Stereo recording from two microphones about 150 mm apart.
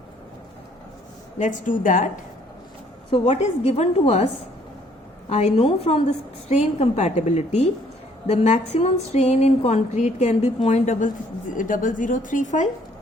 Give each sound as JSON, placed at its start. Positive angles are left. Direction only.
{"t": 1.4, "sound": "speech", "side_deg": 60}
{"t": 3.4, "sound": "speech", "side_deg": 45}
{"t": 5.3, "sound": "speech", "side_deg": 45}